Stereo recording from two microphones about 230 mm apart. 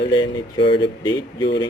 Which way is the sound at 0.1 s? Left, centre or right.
Centre.